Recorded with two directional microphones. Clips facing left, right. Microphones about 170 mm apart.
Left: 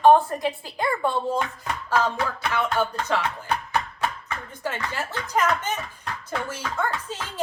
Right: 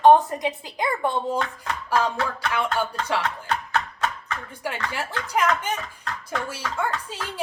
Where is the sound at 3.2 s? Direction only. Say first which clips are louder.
Even; 10° left (ahead or behind).